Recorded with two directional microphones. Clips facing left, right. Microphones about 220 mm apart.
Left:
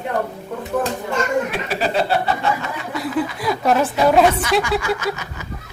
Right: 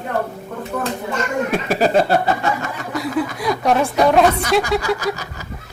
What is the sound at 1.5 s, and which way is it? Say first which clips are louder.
Speech: right 5 dB; 45° right (ahead or behind).